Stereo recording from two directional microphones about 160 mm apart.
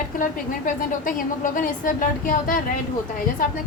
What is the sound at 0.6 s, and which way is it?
A woman's voice, 55° left (ahead or behind).